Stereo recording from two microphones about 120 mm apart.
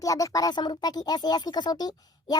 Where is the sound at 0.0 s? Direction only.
30° left (ahead or behind).